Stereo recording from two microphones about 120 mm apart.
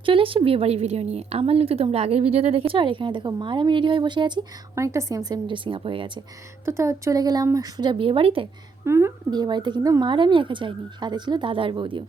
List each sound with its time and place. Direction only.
0.0 s a woman's voice: 45° right (ahead or behind)
4.7 s speech: 25° right (ahead or behind); by 6.2 s 45° right (ahead or behind)
6.7 s a woman's voice: 25° right (ahead or behind); by 8.4 s 50° right (ahead or behind)
8.8 s speech: 20° right (ahead or behind)
9.3 s speech: 35° right (ahead or behind)